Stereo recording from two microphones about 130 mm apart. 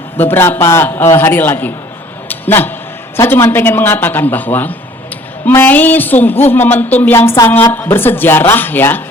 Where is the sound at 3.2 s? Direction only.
20° left (ahead or behind).